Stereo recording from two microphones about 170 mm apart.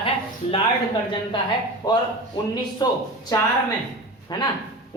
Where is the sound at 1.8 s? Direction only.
20° left (ahead or behind).